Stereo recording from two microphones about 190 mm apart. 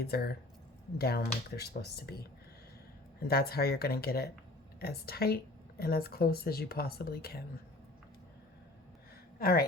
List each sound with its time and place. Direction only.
0.0 s speech: 55° left (ahead or behind)
9.4 s speech: 50° left (ahead or behind)